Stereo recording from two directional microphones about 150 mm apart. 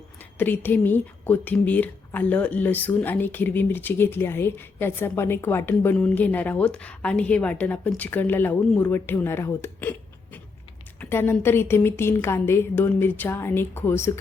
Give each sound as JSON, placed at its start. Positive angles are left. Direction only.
{"t": 0.3, "sound": "speech", "side_deg": 10}
{"t": 11.0, "sound": "speech", "side_deg": 15}